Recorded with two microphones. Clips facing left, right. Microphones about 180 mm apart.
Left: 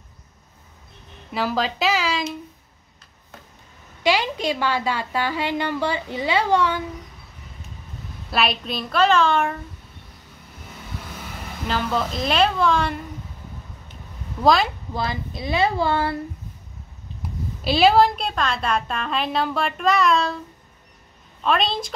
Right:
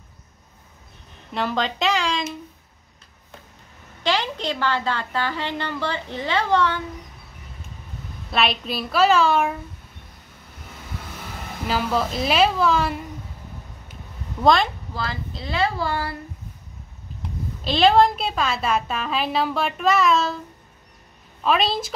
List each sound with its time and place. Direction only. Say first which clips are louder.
1.3 s a woman's voice: left 1 dB; 5° left (ahead or behind)
4.0 s a woman's voice: left 3 dB; 10° left (ahead or behind)
8.3 s a woman's voice: even; centre (ahead or behind)
11.6 s a woman's voice: right 1 dB; 5° right (ahead or behind)
14.4 s a woman's voice: even; centre (ahead or behind)
15.0 s speech: left 3 dB; 15° left (ahead or behind)
17.6 s a woman's voice: even; 5° left (ahead or behind)
21.4 s a woman's voice: right 1 dB; 5° right (ahead or behind)